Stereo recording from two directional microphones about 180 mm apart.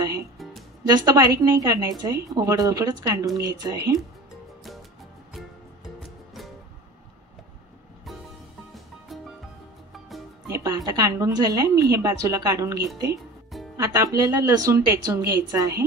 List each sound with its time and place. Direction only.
0.8 s speech: 20° right (ahead or behind)
9.1 s music: centre (ahead or behind)
10.5 s music: 20° right (ahead or behind)
10.9 s speech: 20° right (ahead or behind)